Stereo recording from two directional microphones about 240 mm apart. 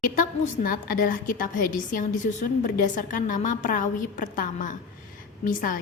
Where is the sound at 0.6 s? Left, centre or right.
Left.